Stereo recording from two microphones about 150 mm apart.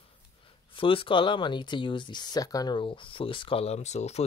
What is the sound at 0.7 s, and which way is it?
Speech, 35° left (ahead or behind).